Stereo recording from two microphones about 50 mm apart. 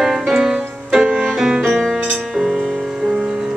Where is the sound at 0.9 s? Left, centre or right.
Centre.